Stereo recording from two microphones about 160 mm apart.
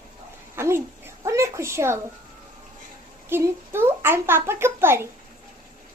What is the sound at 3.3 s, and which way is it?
Speech, 15° right (ahead or behind).